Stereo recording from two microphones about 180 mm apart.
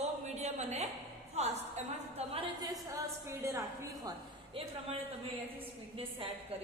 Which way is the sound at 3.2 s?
15° right (ahead or behind).